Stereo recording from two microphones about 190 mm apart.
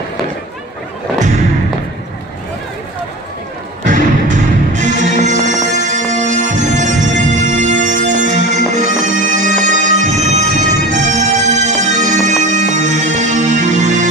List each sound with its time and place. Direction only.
3.8 s music: 40° right (ahead or behind)